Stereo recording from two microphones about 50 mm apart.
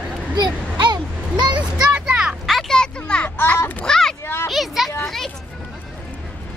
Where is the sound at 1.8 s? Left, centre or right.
Right.